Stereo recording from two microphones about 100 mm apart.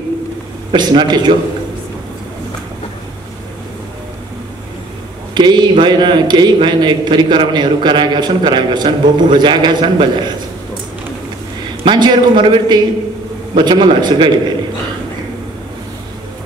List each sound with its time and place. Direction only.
0.7 s a man's voice: 50° right (ahead or behind)
5.3 s a man's voice: 45° right (ahead or behind)
11.8 s a man's voice: 50° right (ahead or behind)